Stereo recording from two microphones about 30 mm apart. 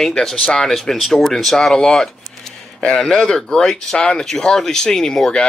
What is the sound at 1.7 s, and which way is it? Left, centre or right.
Speech, left.